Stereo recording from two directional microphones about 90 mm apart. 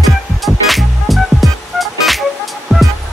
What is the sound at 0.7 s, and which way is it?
Music, centre (ahead or behind).